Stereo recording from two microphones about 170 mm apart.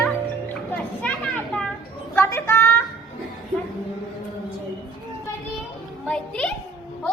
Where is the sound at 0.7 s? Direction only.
5° left (ahead or behind).